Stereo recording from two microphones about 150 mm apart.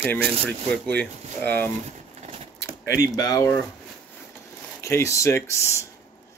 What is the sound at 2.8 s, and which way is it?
Speech, 25° left (ahead or behind).